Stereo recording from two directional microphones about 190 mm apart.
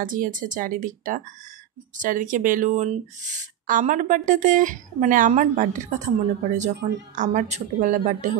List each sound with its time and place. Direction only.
0.0 s speech: 45° right (ahead or behind)